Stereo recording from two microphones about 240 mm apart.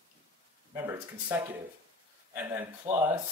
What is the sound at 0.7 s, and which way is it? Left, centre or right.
Speech, centre.